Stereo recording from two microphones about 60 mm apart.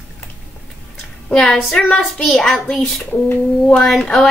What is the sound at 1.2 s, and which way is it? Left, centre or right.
Speech, centre.